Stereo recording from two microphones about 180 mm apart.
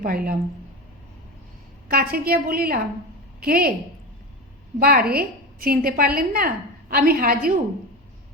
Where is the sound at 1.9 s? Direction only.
55° right (ahead or behind).